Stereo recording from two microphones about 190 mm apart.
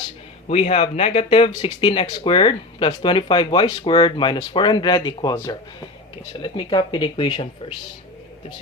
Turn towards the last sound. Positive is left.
turn(degrees=30)  # may be behind; listen again after turning